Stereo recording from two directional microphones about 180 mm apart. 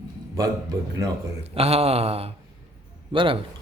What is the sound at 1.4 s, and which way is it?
Speech, 35° right (ahead or behind).